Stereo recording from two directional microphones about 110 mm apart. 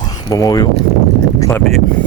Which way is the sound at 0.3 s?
30° left (ahead or behind).